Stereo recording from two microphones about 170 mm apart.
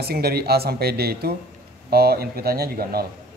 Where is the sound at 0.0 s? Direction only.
65° right (ahead or behind).